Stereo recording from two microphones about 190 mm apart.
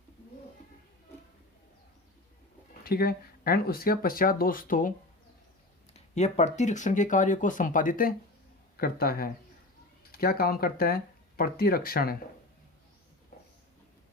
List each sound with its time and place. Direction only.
2.8 s speech: 55° left (ahead or behind)
5.9 s speech: 35° left (ahead or behind); by 12.1 s 50° left (ahead or behind)